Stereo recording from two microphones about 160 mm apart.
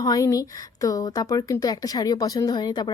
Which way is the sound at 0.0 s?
20° left (ahead or behind).